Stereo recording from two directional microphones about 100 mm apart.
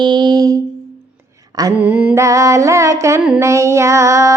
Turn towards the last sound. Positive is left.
turn(degrees=-30)  # may be behind; listen again after turning